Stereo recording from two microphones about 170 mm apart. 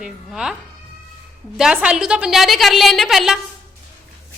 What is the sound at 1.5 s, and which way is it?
A woman's voice, 5° right (ahead or behind).